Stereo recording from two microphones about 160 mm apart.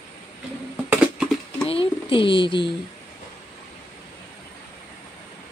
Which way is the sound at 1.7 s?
35° left (ahead or behind).